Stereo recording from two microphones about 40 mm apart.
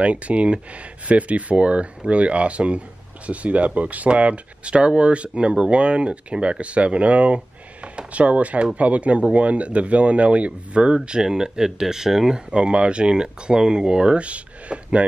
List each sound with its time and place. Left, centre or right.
0.0 s speech: right
7.3 s a sound: right
8.7 s speech: right
11.2 s speech: centre